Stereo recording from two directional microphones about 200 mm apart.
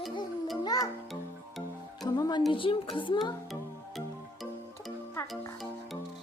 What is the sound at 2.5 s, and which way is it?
Speech, 25° left (ahead or behind).